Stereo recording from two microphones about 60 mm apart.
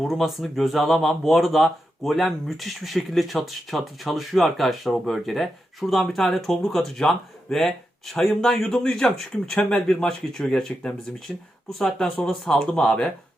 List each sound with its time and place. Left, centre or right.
0.0 s speech: centre
9.6 s speech: centre